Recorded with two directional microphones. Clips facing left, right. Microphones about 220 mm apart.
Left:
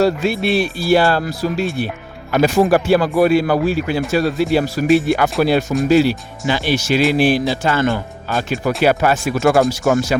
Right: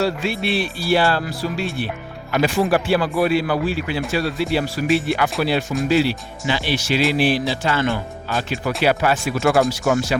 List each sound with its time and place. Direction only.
0.0 s speech: 40° left (ahead or behind)